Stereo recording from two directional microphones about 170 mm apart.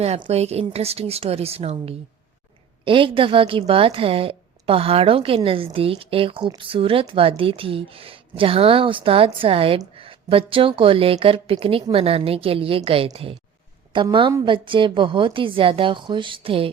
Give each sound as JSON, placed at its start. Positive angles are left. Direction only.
{"t": 0.0, "sound": "a woman's voice", "side_deg": -35}